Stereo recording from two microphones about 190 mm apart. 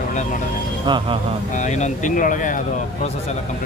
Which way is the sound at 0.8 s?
25° right (ahead or behind).